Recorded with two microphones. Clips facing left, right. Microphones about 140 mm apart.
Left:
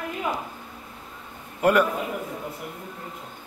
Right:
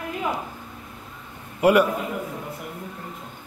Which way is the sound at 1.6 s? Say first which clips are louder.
Right 3 dB; 10° right (ahead or behind).